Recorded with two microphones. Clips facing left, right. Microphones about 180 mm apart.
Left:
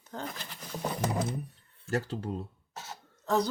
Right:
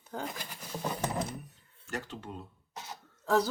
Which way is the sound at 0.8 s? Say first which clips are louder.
Left 2 dB; 10° left (ahead or behind).